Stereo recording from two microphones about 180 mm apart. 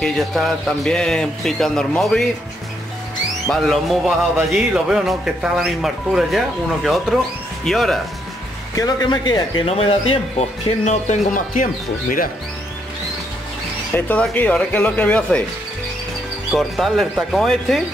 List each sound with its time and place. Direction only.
0.0 s speech: centre (ahead or behind)
3.4 s speech: centre (ahead or behind)
8.7 s speech: 20° left (ahead or behind)
10.9 s speech: 45° left (ahead or behind)
13.9 s speech: 10° left (ahead or behind)
16.5 s speech: centre (ahead or behind)